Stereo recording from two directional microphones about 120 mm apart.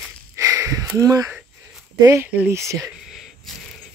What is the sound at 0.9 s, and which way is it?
Speech, 30° right (ahead or behind).